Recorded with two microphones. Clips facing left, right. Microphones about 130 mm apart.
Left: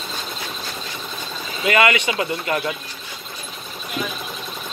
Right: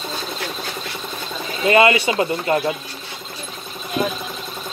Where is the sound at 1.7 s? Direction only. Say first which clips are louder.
Right 3 dB; 30° right (ahead or behind).